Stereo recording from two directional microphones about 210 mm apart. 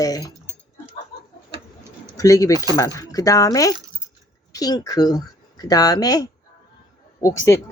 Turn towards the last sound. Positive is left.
turn(degrees=15)  # may be behind; listen again after turning